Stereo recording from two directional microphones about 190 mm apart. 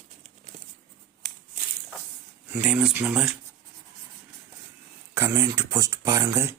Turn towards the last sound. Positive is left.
turn(degrees=-15)  # may be behind; listen again after turning